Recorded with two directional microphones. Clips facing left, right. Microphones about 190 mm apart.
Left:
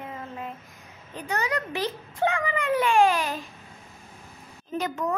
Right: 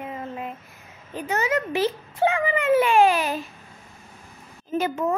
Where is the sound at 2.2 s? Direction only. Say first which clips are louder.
Right 4 dB; 20° right (ahead or behind).